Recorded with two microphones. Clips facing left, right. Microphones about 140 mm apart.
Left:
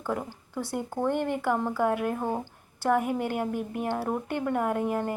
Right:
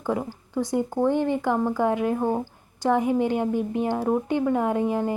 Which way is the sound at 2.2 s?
15° right (ahead or behind).